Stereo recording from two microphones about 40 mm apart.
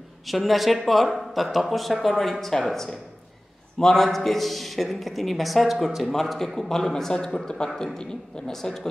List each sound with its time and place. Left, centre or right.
0.3 s a woman's voice: centre